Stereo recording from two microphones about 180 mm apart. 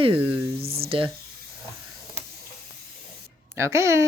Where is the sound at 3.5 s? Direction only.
15° right (ahead or behind).